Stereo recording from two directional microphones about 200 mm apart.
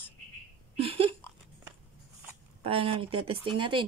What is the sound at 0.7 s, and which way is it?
Speech, 30° right (ahead or behind).